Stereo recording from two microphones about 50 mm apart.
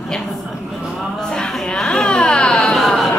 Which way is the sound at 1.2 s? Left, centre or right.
Centre.